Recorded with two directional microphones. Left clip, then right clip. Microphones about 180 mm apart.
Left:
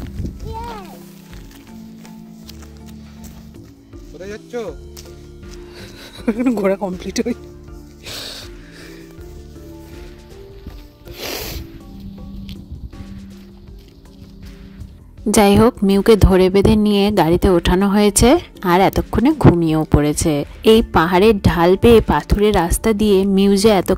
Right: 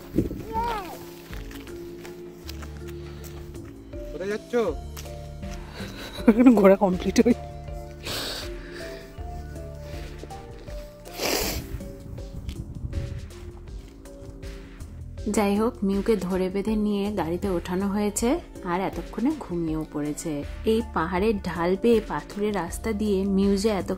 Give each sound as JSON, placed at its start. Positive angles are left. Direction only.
{"t": 0.6, "sound": "a sound", "side_deg": 0}
{"t": 4.2, "sound": "speech", "side_deg": -80}
{"t": 5.8, "sound": "speech", "side_deg": -5}
{"t": 8.0, "sound": "music", "side_deg": -5}
{"t": 11.1, "sound": "music", "side_deg": -20}
{"t": 15.3, "sound": "a woman's voice", "side_deg": 55}